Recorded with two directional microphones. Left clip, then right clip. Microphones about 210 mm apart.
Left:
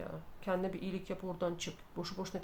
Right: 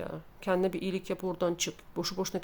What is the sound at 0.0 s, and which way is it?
Speech, 50° right (ahead or behind).